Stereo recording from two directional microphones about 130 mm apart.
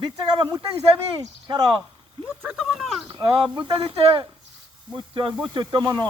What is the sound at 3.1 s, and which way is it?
Speech, 40° right (ahead or behind).